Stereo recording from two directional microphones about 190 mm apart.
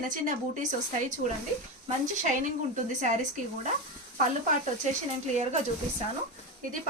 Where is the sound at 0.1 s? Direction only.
40° right (ahead or behind).